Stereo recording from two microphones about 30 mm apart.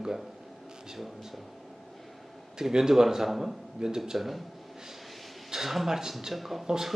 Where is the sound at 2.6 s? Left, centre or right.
Centre.